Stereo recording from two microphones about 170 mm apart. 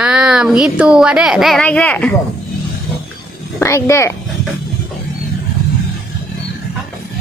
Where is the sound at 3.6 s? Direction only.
15° left (ahead or behind).